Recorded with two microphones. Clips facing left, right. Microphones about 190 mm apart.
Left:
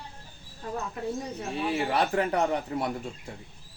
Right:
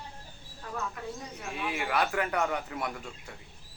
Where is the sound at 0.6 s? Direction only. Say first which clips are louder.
Left 4 dB; 30° left (ahead or behind).